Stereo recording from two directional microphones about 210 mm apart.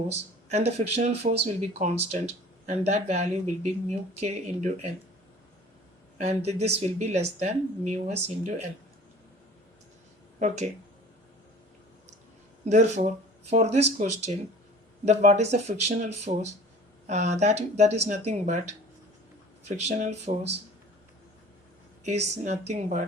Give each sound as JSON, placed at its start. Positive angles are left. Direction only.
{"t": 0.1, "sound": "speech", "side_deg": -30}
{"t": 6.1, "sound": "speech", "side_deg": -30}
{"t": 10.4, "sound": "speech", "side_deg": -35}
{"t": 12.6, "sound": "speech", "side_deg": -35}
{"t": 19.6, "sound": "speech", "side_deg": -30}
{"t": 22.0, "sound": "speech", "side_deg": -30}